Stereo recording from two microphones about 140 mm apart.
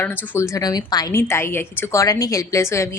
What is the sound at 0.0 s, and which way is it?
A woman's voice, 20° left (ahead or behind).